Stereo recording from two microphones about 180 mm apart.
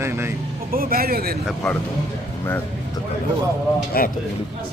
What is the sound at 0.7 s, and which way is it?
Speech, 55° right (ahead or behind).